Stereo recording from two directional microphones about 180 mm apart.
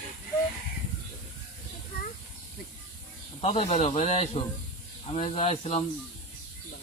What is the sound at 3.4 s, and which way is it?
Speech, 40° left (ahead or behind).